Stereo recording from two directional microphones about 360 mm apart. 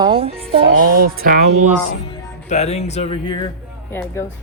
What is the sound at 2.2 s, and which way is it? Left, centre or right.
Speech, centre.